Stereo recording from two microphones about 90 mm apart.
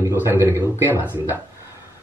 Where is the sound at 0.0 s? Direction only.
25° right (ahead or behind).